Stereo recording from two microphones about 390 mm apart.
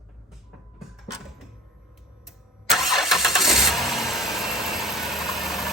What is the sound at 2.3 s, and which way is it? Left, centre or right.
Vehicle, centre.